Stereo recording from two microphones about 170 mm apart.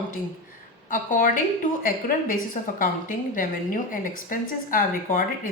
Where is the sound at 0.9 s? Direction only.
50° left (ahead or behind).